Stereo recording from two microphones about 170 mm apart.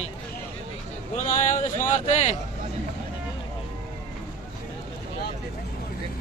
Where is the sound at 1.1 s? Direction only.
50° left (ahead or behind).